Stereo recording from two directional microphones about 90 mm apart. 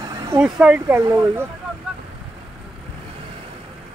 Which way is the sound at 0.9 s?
25° right (ahead or behind).